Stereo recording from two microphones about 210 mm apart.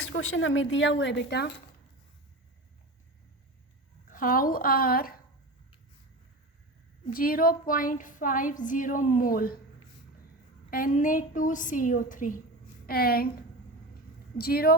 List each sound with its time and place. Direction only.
0.1 s a woman's voice: 70° left (ahead or behind); by 1.5 s 55° left (ahead or behind)
4.1 s a woman's voice: 40° left (ahead or behind)
7.1 s a woman's voice: 45° left (ahead or behind)
10.7 s a woman's voice: 40° left (ahead or behind)
14.3 s a woman's voice: 45° left (ahead or behind)